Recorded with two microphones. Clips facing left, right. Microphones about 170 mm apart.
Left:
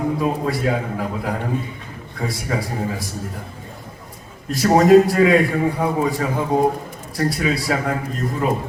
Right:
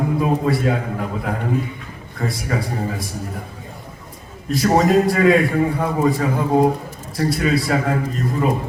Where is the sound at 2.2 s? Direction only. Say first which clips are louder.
Right 1 dB; 5° left (ahead or behind).